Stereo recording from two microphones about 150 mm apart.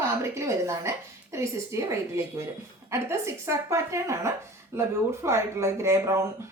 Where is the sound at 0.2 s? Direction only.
20° right (ahead or behind).